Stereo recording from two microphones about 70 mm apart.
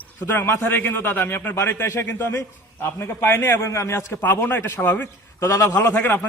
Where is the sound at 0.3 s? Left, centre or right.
Left.